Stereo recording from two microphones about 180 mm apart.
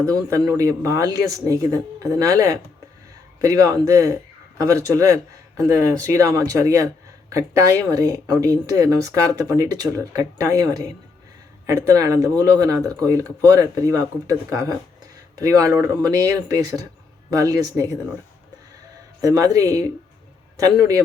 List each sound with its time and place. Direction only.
0.0 s speech: 20° right (ahead or behind)
19.2 s speech: 20° right (ahead or behind)